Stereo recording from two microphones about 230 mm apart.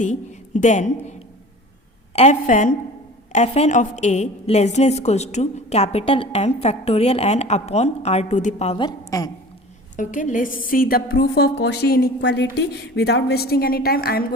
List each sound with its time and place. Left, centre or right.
0.0 s a woman's voice: left
2.1 s a woman's voice: left
10.0 s a woman's voice: left